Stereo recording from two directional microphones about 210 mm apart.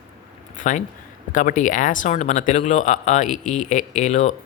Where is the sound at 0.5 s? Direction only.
35° left (ahead or behind).